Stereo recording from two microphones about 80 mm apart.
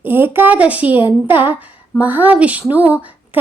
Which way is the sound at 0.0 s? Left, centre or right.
Right.